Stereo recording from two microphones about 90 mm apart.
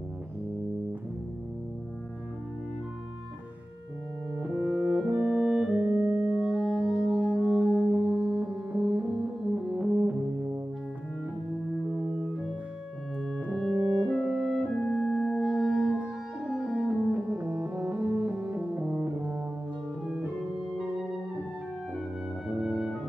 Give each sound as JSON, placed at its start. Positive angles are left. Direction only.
{"t": 4.4, "sound": "brass instrument", "side_deg": -15}
{"t": 8.5, "sound": "music", "side_deg": -10}
{"t": 9.8, "sound": "music", "side_deg": -20}
{"t": 13.5, "sound": "brass instrument", "side_deg": 5}
{"t": 14.0, "sound": "music", "side_deg": -10}
{"t": 22.6, "sound": "music", "side_deg": 0}